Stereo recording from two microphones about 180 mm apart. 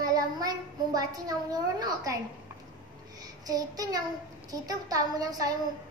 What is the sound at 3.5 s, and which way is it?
A woman's voice, 20° right (ahead or behind).